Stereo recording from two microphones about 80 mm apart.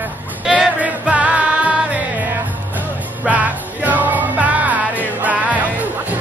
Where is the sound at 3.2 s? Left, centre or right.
Centre.